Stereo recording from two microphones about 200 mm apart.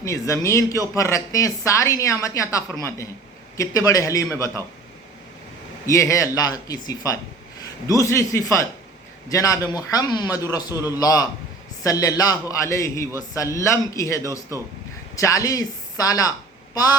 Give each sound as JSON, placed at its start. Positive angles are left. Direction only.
{"t": 0.0, "sound": "speech", "side_deg": 15}
{"t": 5.8, "sound": "a man's voice", "side_deg": 15}